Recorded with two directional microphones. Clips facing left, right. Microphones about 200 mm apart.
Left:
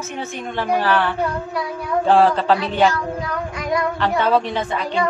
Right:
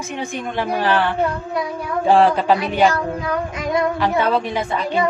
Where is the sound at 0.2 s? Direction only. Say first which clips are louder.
Right 2 dB; 15° right (ahead or behind).